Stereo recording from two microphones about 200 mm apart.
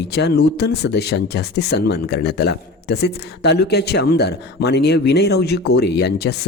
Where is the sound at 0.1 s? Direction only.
55° left (ahead or behind).